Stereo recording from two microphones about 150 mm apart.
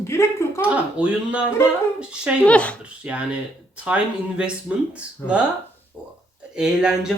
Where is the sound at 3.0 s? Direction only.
10° right (ahead or behind).